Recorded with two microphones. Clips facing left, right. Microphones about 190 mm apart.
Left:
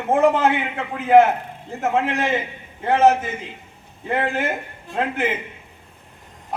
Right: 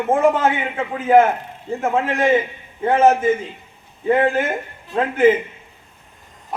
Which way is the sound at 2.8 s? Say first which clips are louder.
Right 2 dB; 45° right (ahead or behind).